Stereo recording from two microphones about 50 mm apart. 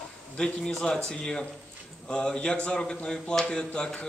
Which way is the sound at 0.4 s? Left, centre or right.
Centre.